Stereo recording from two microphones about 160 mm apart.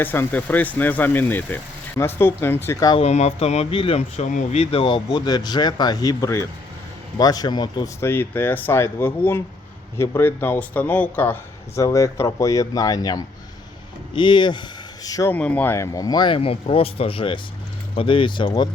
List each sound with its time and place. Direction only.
0.0 s speech: 10° left (ahead or behind)
2.9 s speech: 40° left (ahead or behind)
8.0 s speech: 15° left (ahead or behind)
15.3 s speech: 10° left (ahead or behind); by 18.7 s 30° left (ahead or behind)